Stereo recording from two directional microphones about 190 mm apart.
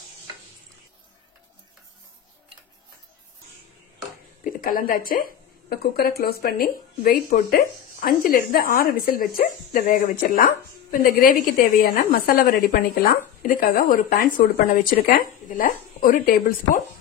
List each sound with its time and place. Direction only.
4.5 s speech: 45° left (ahead or behind)